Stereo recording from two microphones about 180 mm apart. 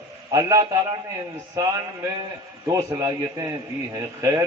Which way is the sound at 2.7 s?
20° right (ahead or behind).